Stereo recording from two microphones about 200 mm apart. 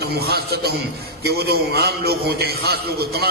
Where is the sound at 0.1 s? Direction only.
50° right (ahead or behind).